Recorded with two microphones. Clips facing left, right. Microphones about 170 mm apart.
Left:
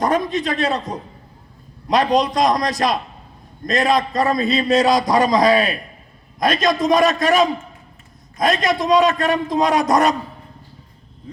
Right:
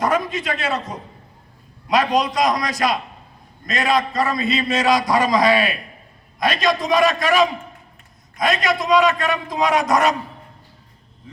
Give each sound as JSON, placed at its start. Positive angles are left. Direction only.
{"t": 0.0, "sound": "a man's voice", "side_deg": 40}
{"t": 8.4, "sound": "a man's voice", "side_deg": 40}